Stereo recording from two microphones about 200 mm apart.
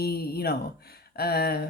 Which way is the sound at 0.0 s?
50° left (ahead or behind).